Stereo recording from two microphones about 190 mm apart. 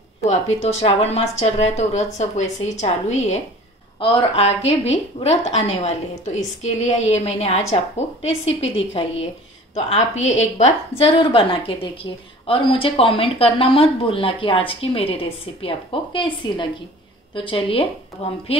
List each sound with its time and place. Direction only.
0.2 s a woman's voice: 35° left (ahead or behind)
4.0 s a woman's voice: 30° left (ahead or behind)